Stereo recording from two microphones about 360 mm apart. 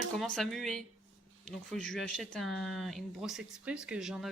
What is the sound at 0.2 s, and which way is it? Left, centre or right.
Speech, centre.